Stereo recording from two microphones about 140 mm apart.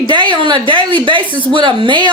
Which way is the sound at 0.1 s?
35° right (ahead or behind).